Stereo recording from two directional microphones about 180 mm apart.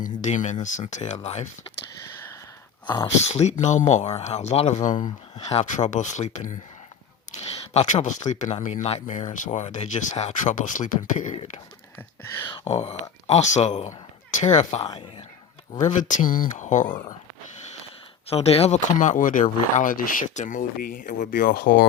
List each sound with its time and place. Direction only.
0.0 s speech: 45° left (ahead or behind)
2.8 s speech: 20° left (ahead or behind)
3.2 s speech: 35° left (ahead or behind)
18.3 s speech: 35° left (ahead or behind)
18.9 s speech: 45° left (ahead or behind)